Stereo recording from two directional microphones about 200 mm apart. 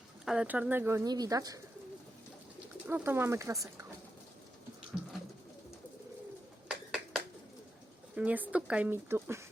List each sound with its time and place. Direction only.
0.3 s speech: 5° right (ahead or behind)
2.8 s speech: 10° right (ahead or behind)
6.7 s finger snapping: 5° right (ahead or behind)
8.1 s speech: 5° right (ahead or behind)